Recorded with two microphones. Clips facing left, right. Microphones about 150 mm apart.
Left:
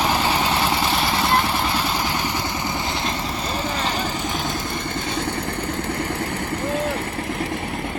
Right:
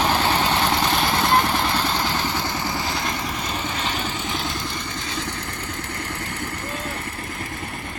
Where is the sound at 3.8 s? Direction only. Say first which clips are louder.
Left 3 dB; 40° left (ahead or behind).